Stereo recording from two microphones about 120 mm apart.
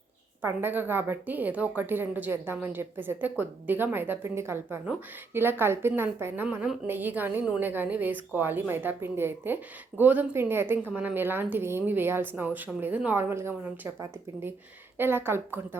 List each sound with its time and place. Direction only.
0.4 s a woman's voice: 20° right (ahead or behind)